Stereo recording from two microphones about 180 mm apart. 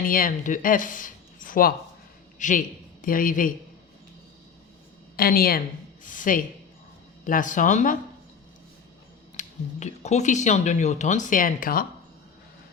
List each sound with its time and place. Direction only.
0.0 s a man's voice: 50° left (ahead or behind)
5.1 s a woman's voice: 55° left (ahead or behind)
9.3 s speech: 40° left (ahead or behind)